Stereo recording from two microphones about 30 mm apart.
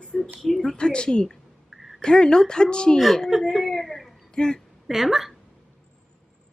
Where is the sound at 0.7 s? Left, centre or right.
Left.